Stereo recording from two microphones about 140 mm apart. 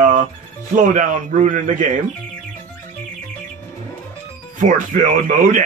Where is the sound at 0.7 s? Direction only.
60° right (ahead or behind).